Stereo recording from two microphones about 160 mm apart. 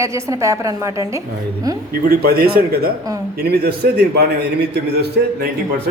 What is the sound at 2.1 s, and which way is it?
A man's voice, 75° right (ahead or behind).